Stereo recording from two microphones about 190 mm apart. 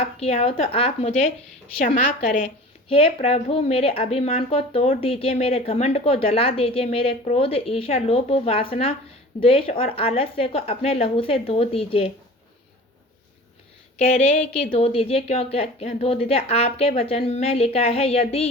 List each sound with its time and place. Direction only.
0.0 s speech: 30° left (ahead or behind)
2.9 s speech: 30° left (ahead or behind)
14.7 s speech: 35° left (ahead or behind)